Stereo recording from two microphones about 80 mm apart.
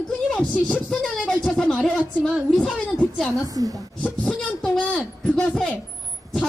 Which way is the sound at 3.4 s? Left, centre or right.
Right.